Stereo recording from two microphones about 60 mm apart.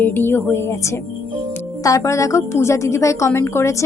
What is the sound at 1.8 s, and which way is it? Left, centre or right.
A woman's voice, left.